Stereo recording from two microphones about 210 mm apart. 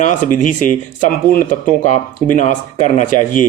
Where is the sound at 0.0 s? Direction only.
35° left (ahead or behind).